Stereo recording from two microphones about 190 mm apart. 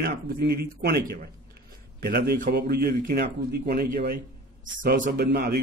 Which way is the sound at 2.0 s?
55° right (ahead or behind).